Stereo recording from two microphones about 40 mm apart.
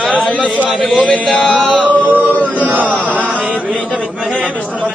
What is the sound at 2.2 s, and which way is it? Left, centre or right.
Chant, right.